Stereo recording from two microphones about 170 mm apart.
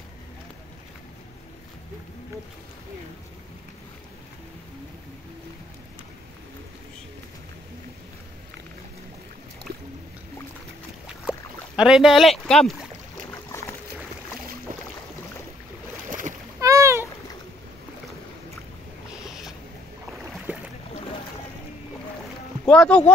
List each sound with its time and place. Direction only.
11.2 s speech: 5° right (ahead or behind)
13.3 s boat: 15° left (ahead or behind)
14.7 s boat: 55° right (ahead or behind)
16.1 s splash: 50° right (ahead or behind)
16.5 s splash: 20° right (ahead or behind)
19.2 s boat: centre (ahead or behind)
22.7 s speech: 10° left (ahead or behind)